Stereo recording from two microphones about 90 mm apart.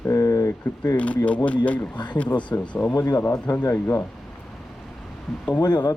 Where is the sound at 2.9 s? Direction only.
50° left (ahead or behind).